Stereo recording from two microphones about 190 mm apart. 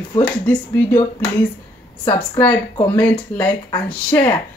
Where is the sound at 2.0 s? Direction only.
25° left (ahead or behind).